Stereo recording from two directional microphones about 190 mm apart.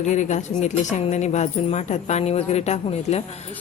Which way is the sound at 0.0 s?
40° left (ahead or behind).